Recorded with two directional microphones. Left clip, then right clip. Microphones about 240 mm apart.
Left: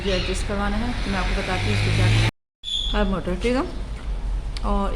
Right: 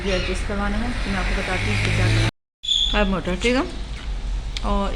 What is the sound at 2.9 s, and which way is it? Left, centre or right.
Speech, centre.